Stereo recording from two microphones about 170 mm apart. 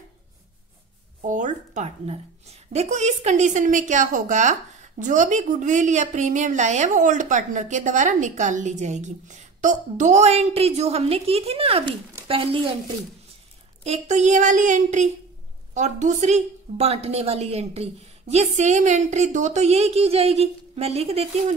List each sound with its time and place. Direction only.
1.2 s a woman's voice: 45° right (ahead or behind); by 12.9 s 30° right (ahead or behind)
13.8 s a woman's voice: 45° right (ahead or behind)